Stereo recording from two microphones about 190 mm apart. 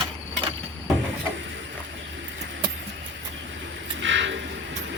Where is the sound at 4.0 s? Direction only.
80° right.